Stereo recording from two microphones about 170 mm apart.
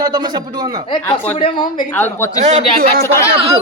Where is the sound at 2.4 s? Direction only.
40° right (ahead or behind).